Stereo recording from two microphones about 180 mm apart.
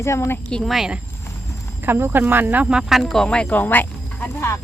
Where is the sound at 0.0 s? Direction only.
15° left (ahead or behind).